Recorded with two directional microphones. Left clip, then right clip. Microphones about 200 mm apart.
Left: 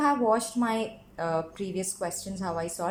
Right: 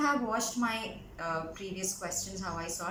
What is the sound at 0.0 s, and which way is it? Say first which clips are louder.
A woman's voice: left 6 dB; 45° left (ahead or behind).